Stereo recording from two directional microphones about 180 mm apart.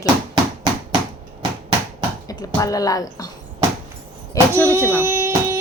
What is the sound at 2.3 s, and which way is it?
Speech, 20° left (ahead or behind).